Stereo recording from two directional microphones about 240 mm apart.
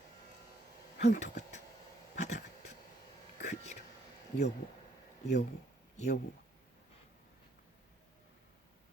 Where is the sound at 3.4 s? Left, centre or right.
Left.